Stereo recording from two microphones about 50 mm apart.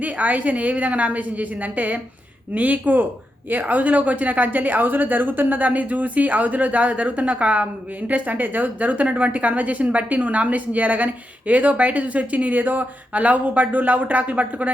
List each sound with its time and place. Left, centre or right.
0.0 s a woman's voice: right